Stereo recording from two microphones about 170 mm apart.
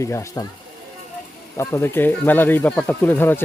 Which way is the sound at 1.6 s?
15° left (ahead or behind).